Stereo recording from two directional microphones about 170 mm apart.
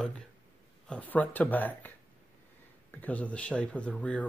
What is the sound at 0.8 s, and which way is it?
Speech, 10° left (ahead or behind).